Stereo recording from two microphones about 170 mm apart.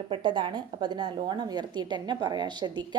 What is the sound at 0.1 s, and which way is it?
A woman's voice, 30° right (ahead or behind).